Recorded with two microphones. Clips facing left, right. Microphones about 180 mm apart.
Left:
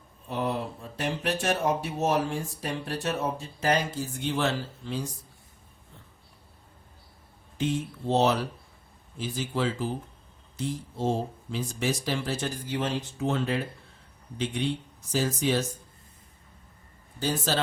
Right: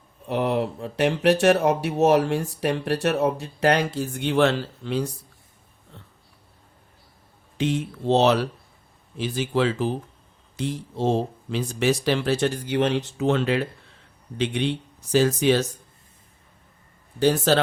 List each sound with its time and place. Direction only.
0.3 s speech: 70° right (ahead or behind)
7.6 s speech: 75° right (ahead or behind)
17.2 s speech: 65° right (ahead or behind)